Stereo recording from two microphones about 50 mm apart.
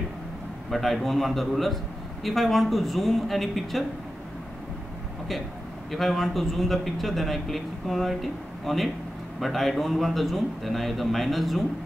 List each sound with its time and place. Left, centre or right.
0.7 s a man's voice: centre
5.9 s a man's voice: centre